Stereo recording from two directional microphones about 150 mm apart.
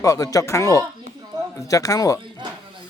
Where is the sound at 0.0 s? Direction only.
20° left (ahead or behind).